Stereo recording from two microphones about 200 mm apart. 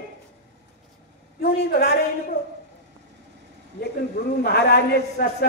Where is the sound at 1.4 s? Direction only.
55° left (ahead or behind).